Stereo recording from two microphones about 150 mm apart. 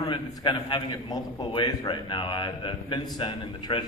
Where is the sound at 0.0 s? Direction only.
30° left (ahead or behind).